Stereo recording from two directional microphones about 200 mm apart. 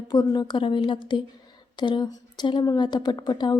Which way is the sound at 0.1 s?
20° left (ahead or behind).